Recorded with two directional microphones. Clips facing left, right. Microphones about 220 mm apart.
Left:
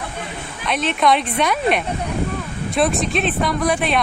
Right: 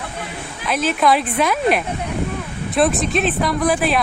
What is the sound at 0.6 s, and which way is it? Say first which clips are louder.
A woman's voice: right 1 dB; centre (ahead or behind).